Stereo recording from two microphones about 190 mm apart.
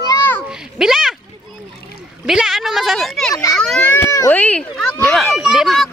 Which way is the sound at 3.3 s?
15° left (ahead or behind).